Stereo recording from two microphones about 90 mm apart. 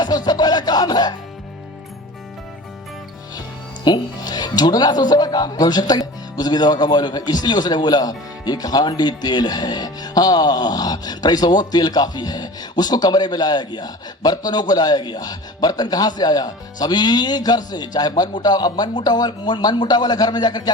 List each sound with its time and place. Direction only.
0.0 s music: 50° left (ahead or behind)
3.8 s speech: 50° left (ahead or behind)